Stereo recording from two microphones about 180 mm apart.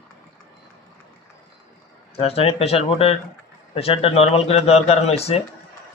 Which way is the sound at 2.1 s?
35° left (ahead or behind).